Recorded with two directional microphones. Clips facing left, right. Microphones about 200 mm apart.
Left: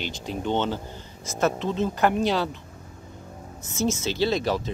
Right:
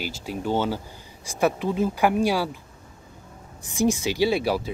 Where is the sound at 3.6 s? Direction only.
15° right (ahead or behind).